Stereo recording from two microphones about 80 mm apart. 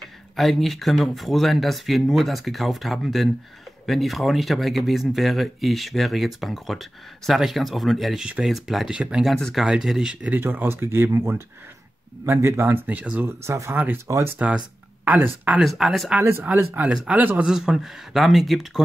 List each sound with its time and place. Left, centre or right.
0.4 s speech: centre
9.3 s speech: centre
9.7 s speech: centre
10.3 s speech: right
13.4 s speech: right
15.0 s speech: right
15.6 s speech: centre
16.2 s speech: right
16.7 s speech: centre
17.5 s speech: centre